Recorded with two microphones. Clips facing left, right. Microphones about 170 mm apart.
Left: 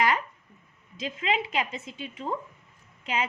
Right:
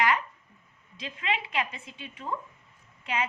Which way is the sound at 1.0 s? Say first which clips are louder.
Left 4 dB; 30° left (ahead or behind).